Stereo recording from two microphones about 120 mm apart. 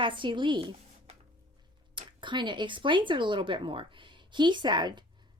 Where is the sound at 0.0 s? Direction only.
40° right (ahead or behind).